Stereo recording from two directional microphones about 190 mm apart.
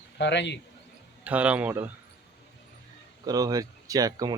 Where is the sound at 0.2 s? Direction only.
65° left (ahead or behind).